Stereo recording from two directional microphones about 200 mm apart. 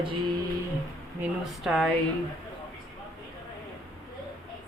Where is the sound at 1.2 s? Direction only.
Centre (ahead or behind).